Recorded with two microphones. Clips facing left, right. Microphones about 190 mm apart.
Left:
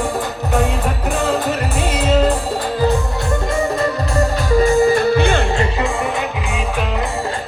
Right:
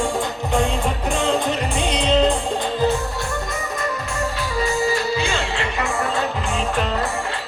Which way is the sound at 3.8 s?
40° left (ahead or behind).